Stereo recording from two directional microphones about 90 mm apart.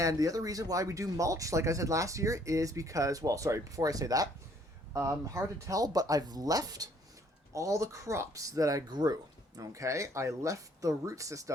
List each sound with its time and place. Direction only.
0.0 s speech: 40° right (ahead or behind)
9.6 s speech: 35° right (ahead or behind)